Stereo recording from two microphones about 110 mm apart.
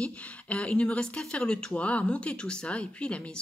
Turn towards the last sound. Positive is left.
turn(degrees=10)  # may be behind; listen again after turning